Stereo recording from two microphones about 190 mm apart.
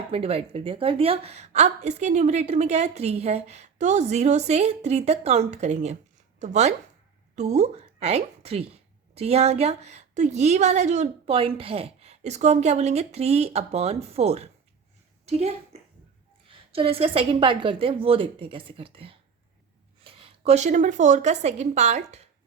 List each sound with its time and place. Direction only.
0.1 s a woman's voice: 30° right (ahead or behind)